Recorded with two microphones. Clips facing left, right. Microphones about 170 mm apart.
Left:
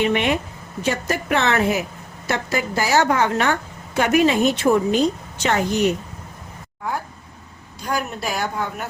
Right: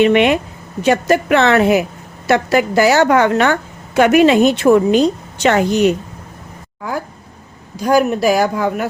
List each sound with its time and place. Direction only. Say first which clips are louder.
0.0 s speech: right 8 dB; 80° right
0.8 s a woman's voice: right 9 dB; 70° right (ahead or behind)
7.8 s speech: right 12 dB; 90° right